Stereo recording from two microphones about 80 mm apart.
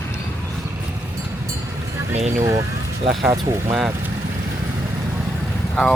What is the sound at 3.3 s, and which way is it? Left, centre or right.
Speech, right.